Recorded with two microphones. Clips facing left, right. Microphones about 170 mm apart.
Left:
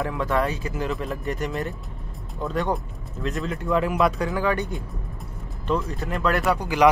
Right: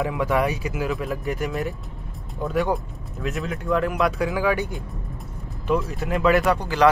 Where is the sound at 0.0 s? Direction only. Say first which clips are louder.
Right 2 dB; 15° right (ahead or behind); by 6.7 s centre (ahead or behind).